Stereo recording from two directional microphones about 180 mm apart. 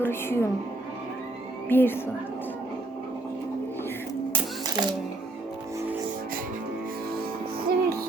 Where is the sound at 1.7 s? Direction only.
10° left (ahead or behind).